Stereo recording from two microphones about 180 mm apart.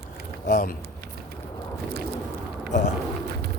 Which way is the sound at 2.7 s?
45° left (ahead or behind).